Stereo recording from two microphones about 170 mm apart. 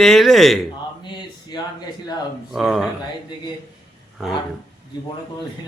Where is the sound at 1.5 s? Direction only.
25° left (ahead or behind).